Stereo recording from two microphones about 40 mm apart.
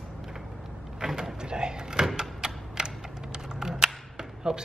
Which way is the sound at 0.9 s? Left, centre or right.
Centre.